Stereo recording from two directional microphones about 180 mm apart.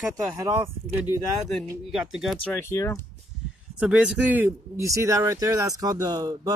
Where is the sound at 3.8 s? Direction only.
5° right (ahead or behind).